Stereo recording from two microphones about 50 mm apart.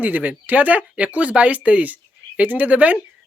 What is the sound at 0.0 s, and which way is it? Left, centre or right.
Speech, right.